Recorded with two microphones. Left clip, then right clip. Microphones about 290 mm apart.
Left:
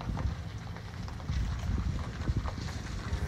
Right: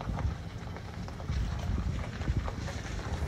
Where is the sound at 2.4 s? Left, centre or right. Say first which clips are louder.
Right 1 dB; centre.